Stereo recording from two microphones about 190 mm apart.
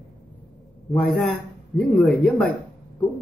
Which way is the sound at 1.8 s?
Centre (ahead or behind).